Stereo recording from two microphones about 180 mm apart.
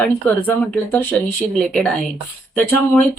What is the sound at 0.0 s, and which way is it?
Speech, 10° left (ahead or behind).